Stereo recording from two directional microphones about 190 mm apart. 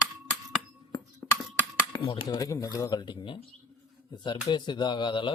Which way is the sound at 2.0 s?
25° left (ahead or behind).